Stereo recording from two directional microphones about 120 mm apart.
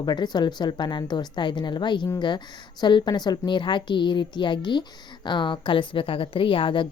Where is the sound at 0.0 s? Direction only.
35° left (ahead or behind).